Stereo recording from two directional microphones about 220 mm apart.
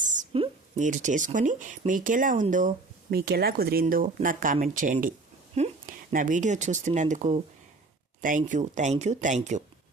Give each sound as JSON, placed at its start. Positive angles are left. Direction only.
{"t": 0.0, "sound": "speech", "side_deg": -35}